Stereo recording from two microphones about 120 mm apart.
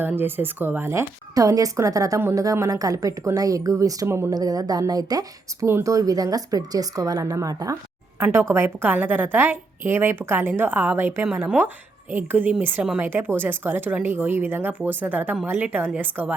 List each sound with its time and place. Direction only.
0.2 s a woman's voice: 15° right (ahead or behind)
4.4 s a woman's voice: 35° right (ahead or behind); by 16.3 s 15° right (ahead or behind)